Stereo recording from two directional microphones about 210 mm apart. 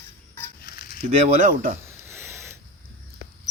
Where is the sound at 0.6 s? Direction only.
45° left (ahead or behind).